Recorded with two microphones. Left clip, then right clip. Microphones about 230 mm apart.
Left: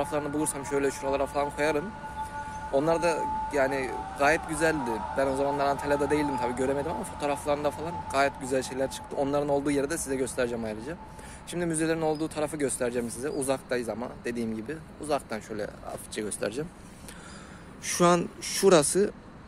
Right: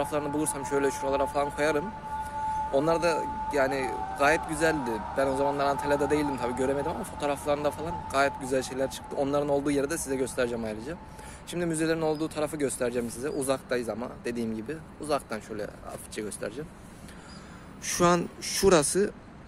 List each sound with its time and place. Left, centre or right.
0.0 s speech: centre
15.5 s speech: centre
16.3 s speech: left
17.8 s speech: centre